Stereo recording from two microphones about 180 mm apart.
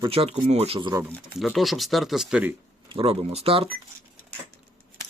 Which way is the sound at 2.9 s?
35° right (ahead or behind).